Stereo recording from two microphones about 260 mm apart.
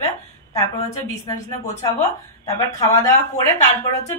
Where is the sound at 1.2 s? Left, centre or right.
Centre.